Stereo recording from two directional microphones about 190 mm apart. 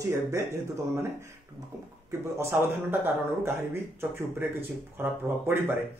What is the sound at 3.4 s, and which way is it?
Speech, 10° right (ahead or behind).